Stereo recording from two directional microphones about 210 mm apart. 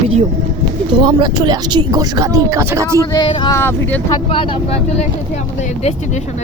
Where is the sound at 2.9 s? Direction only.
20° left (ahead or behind).